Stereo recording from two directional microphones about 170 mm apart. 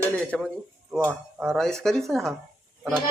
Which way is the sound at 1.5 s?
Centre (ahead or behind).